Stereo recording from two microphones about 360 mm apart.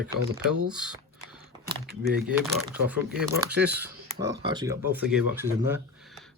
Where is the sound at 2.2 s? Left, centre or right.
Centre.